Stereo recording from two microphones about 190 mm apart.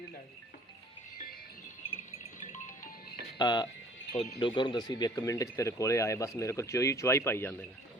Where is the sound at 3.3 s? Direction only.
25° left (ahead or behind).